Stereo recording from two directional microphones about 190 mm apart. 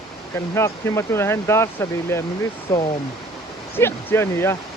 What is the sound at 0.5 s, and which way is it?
Speech, 15° left (ahead or behind).